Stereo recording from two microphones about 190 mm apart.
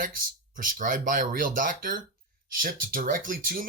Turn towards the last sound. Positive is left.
turn(degrees=-45)  # may be behind; listen again after turning